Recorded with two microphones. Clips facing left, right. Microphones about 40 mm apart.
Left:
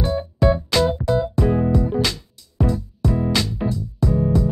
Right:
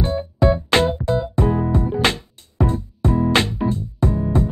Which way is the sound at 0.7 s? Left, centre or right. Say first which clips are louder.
Right 1 dB; right.